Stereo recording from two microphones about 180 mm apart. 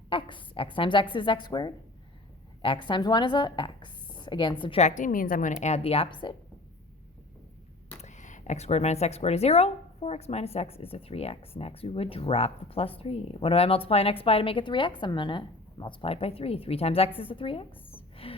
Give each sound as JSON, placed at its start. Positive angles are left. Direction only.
{"t": 0.1, "sound": "a woman's voice", "side_deg": 30}
{"t": 8.0, "sound": "a woman's voice", "side_deg": 40}
{"t": 18.2, "sound": "music", "side_deg": 30}